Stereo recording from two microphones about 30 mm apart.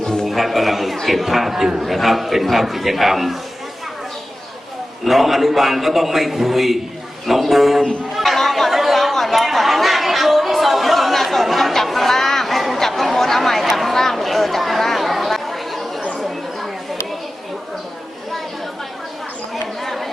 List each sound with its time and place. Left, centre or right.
0.0 s a sound: left
0.3 s a man's voice: centre
5.0 s a man's voice: centre
8.1 s chatter: centre
8.4 s speech: centre
8.7 s chatter: centre
13.1 s a sound: centre
16.1 s chatter: centre
19.8 s chatter: centre